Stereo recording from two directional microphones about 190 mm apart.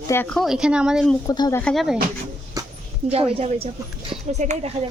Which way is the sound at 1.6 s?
5° left (ahead or behind).